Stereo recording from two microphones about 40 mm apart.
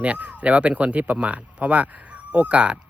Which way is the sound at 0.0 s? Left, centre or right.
Right.